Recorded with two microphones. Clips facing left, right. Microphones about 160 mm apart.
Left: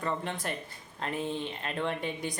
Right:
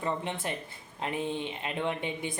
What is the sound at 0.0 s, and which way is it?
Speech, 20° right (ahead or behind).